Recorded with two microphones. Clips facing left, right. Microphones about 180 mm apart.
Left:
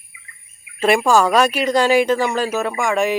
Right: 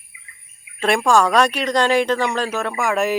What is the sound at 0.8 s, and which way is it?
A woman's voice, 5° left (ahead or behind).